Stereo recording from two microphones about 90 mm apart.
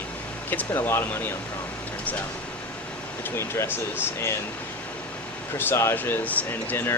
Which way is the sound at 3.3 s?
30° left (ahead or behind).